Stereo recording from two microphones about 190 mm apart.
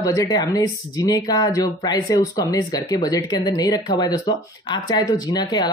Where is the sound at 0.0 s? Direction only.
20° left (ahead or behind).